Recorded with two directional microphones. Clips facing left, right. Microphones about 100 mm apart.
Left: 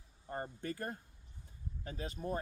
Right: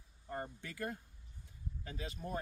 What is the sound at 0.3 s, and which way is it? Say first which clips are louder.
Speech: left 3 dB; 40° left (ahead or behind).